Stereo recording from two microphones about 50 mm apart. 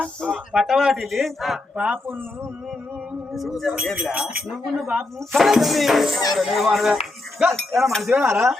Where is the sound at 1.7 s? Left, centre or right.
Right.